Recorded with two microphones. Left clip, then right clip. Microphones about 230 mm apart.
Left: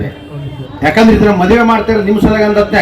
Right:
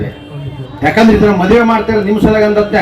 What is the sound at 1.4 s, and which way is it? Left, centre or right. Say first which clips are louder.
A man's voice: even; left.